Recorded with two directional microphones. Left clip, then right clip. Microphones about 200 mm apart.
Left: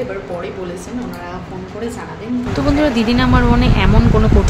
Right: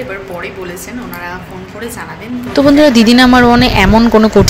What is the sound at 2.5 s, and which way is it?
A woman's voice, 35° right (ahead or behind).